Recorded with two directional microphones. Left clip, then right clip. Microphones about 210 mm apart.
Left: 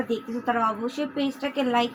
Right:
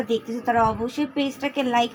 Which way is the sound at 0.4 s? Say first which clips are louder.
Right 4 dB; 40° right (ahead or behind).